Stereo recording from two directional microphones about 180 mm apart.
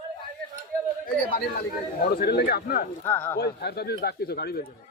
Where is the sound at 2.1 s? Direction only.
60° left (ahead or behind).